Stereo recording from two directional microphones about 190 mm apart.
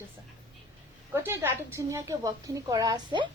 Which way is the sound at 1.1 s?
10° right (ahead or behind).